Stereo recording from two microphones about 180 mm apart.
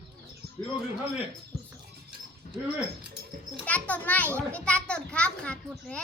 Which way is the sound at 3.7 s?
10° left (ahead or behind).